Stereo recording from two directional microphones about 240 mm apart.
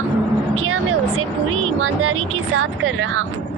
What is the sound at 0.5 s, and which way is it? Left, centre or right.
Vehicle, right.